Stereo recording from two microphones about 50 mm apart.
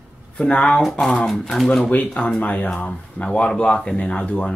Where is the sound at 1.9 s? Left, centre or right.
Left.